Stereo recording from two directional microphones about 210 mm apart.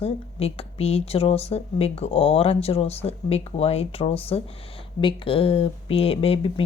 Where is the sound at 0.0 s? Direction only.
30° left (ahead or behind).